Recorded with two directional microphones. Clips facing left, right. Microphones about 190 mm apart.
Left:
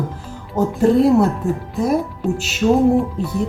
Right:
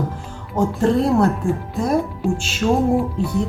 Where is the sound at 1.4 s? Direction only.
25° left (ahead or behind).